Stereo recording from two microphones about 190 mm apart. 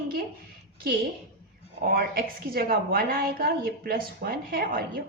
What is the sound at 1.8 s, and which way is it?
A woman's voice, 50° right (ahead or behind).